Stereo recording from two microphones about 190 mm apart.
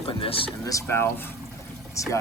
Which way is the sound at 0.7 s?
15° left (ahead or behind).